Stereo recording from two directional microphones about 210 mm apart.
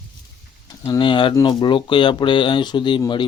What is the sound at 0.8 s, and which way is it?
Speech, 25° left (ahead or behind).